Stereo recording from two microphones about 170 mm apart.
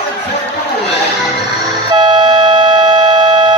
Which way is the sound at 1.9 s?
30° right (ahead or behind).